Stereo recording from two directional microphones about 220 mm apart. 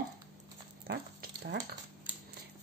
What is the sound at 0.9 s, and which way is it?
Dog, 45° right (ahead or behind).